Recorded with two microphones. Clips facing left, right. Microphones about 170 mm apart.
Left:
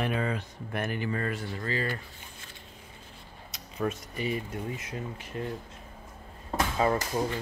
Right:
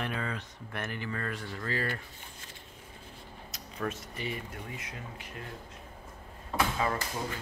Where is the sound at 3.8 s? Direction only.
20° left (ahead or behind).